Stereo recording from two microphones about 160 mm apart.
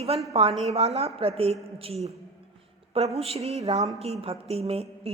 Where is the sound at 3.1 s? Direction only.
40° right (ahead or behind).